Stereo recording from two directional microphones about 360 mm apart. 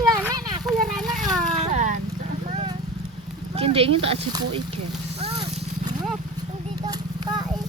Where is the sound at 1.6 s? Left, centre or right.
Centre.